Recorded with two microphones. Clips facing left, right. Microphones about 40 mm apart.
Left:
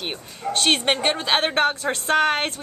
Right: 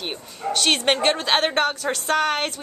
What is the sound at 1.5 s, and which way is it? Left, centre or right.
Speech, left.